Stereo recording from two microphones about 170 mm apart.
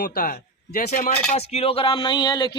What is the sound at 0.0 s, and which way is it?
Speech, 60° left (ahead or behind).